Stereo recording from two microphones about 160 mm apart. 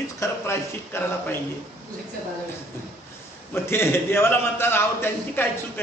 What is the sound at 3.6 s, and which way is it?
A man's voice, 15° left (ahead or behind).